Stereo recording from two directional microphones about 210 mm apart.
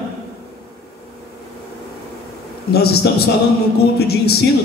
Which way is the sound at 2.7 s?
50° left (ahead or behind).